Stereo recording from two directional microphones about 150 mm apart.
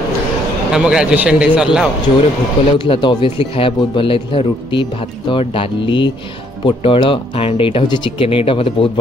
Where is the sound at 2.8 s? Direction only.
30° left (ahead or behind).